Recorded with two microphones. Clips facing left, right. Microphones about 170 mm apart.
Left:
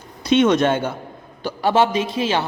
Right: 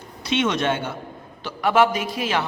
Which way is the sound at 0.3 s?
45° left (ahead or behind).